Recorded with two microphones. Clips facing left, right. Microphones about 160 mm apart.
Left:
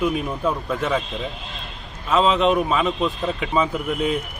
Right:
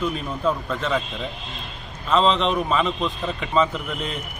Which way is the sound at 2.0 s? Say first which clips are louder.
Left 2 dB; 5° left (ahead or behind).